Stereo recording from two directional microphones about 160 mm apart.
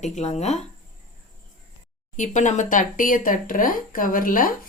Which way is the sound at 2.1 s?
50° left (ahead or behind).